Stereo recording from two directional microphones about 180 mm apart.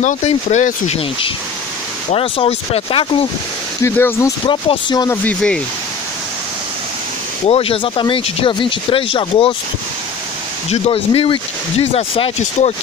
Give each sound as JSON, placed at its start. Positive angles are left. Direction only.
{"t": 0.0, "sound": "speech", "side_deg": 40}
{"t": 3.8, "sound": "speech", "side_deg": 15}
{"t": 4.5, "sound": "speech", "side_deg": 25}
{"t": 5.1, "sound": "speech", "side_deg": 10}
{"t": 7.4, "sound": "speech", "side_deg": 30}
{"t": 10.7, "sound": "speech", "side_deg": 30}